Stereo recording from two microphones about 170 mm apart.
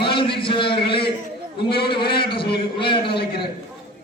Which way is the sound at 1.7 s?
30° left (ahead or behind).